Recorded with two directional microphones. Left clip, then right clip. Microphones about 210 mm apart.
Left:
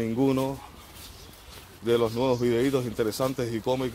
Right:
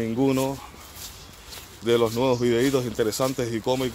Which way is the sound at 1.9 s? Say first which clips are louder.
Right 3 dB; 5° right (ahead or behind).